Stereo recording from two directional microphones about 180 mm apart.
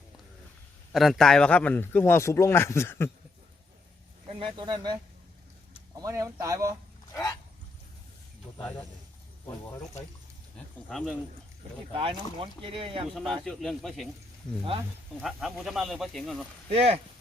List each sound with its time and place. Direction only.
0.9 s a man's voice: centre (ahead or behind)
4.3 s speech: 30° right (ahead or behind)
7.1 s speech: 20° left (ahead or behind)
10.8 s speech: centre (ahead or behind)
11.9 s speech: 30° right (ahead or behind)
13.1 s speech: centre (ahead or behind)
14.6 s speech: 30° right (ahead or behind)
15.2 s speech: centre (ahead or behind)
16.6 s speech: 35° right (ahead or behind)